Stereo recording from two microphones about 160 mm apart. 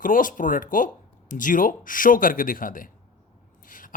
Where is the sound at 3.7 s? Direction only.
55° left (ahead or behind).